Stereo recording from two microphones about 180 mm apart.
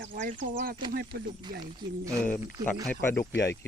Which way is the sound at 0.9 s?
60° right (ahead or behind).